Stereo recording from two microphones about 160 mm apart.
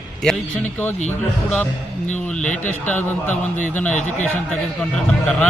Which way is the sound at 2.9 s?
10° left (ahead or behind).